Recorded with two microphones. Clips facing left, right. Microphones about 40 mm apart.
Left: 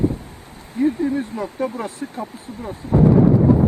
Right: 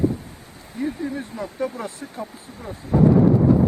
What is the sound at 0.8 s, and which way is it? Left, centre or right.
Speech, left.